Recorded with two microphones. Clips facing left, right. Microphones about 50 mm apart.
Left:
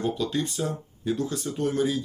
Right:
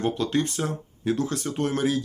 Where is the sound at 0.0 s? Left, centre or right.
Right.